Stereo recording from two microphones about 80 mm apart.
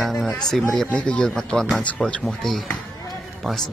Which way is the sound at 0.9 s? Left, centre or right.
Centre.